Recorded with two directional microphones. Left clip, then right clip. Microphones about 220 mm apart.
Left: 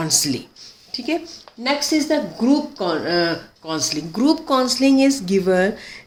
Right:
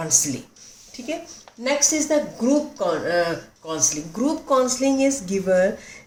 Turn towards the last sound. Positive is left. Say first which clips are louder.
# left 1 dB
turn(degrees=50)  # may be behind; listen again after turning